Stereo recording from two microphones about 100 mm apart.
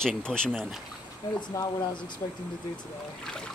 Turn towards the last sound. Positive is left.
turn(degrees=5)  # may be behind; listen again after turning